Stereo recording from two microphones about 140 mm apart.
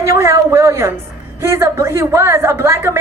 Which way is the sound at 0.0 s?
20° right (ahead or behind).